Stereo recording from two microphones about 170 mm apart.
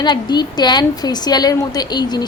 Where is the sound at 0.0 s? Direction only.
25° left (ahead or behind).